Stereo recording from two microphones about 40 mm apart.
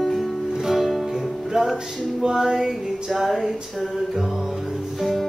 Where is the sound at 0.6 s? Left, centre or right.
Centre.